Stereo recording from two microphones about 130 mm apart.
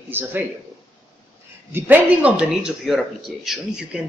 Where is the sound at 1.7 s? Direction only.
15° right (ahead or behind).